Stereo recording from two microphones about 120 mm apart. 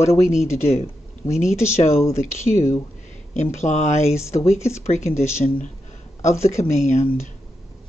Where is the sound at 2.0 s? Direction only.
25° left (ahead or behind).